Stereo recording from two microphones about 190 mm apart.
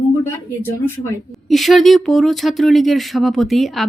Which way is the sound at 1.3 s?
Centre (ahead or behind).